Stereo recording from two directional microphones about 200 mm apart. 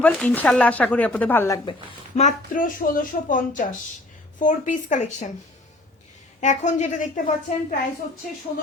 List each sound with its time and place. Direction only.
0.0 s speech: 5° left (ahead or behind)
2.1 s a woman's voice: 40° left (ahead or behind)
6.4 s a woman's voice: 35° left (ahead or behind)